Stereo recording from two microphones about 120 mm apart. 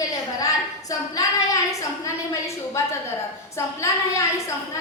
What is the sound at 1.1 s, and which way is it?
A woman's voice, 30° left (ahead or behind).